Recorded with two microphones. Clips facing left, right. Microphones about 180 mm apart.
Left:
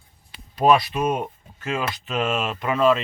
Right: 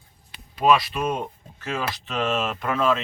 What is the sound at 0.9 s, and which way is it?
Speech, 15° left (ahead or behind).